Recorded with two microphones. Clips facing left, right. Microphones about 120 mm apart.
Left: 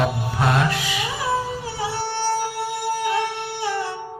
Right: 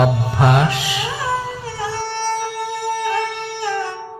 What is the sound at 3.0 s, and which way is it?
Music, 15° left (ahead or behind).